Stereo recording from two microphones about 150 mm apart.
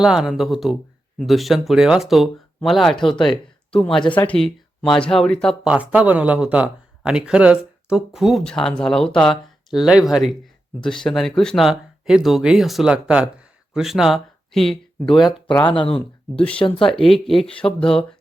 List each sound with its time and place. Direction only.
0.0 s a man's voice: 5° right (ahead or behind)
3.2 s a sound: 5° left (ahead or behind)
4.1 s a man's voice: 10° left (ahead or behind)
5.6 s a man's voice: 10° right (ahead or behind)
15.6 s speech: 35° left (ahead or behind)
16.3 s speech: 10° left (ahead or behind)
16.6 s speech: 35° left (ahead or behind)
16.9 s a man's voice: centre (ahead or behind)